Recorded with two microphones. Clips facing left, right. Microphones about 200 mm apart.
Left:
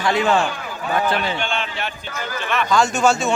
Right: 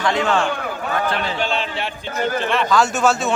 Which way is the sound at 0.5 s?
55° right (ahead or behind).